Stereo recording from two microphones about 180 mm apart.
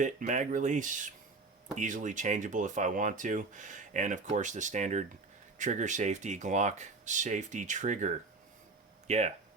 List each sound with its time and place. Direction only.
0.0 s speech: 45° right (ahead or behind)